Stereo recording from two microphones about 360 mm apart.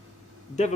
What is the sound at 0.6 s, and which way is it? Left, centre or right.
Speech, centre.